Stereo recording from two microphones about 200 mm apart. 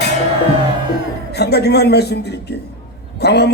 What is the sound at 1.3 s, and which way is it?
A man's voice, 55° left (ahead or behind).